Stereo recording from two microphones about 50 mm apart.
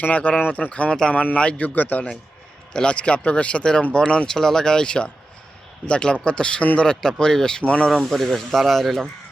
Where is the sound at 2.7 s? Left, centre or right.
Centre.